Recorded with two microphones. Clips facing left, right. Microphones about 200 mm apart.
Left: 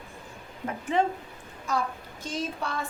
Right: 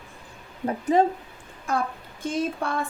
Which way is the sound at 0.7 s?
40° right (ahead or behind).